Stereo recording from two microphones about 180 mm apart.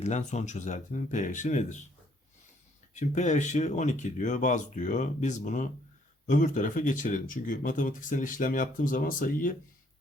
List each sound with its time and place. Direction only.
0.0 s speech: 40° left (ahead or behind)
2.9 s speech: 40° left (ahead or behind)